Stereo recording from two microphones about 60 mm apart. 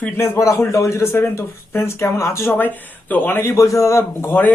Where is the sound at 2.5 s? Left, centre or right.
Left.